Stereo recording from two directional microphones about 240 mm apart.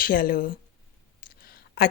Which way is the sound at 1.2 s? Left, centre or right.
Left.